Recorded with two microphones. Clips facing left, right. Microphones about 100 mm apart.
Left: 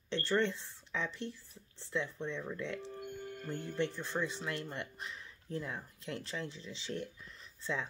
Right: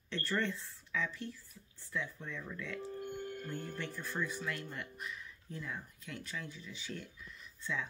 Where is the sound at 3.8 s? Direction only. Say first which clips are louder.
Left 7 dB; 20° left (ahead or behind).